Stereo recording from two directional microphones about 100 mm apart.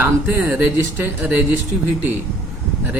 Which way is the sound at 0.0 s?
20° right (ahead or behind).